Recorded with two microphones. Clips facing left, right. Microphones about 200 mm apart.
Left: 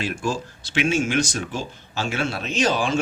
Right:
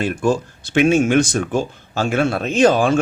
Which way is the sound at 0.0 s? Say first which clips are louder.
Right 7 dB; 55° right (ahead or behind).